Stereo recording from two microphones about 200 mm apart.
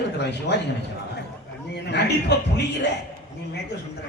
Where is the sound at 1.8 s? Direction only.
55° left (ahead or behind).